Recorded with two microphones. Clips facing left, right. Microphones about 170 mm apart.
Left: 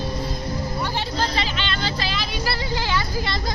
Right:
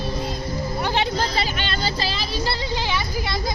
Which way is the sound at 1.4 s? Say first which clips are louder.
Right 1 dB; 40° right (ahead or behind).